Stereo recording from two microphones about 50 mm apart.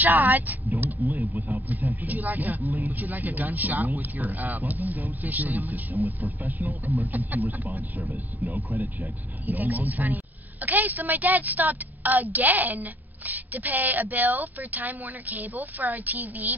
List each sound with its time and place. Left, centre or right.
0.0 s a woman's voice: right
9.5 s a woman's voice: right